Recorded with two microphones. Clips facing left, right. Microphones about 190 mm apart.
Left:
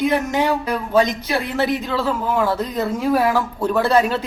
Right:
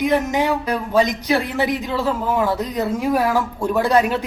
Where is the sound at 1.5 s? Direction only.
15° right (ahead or behind).